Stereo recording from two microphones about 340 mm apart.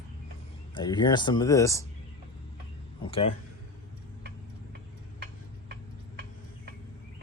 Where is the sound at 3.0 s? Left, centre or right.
Centre.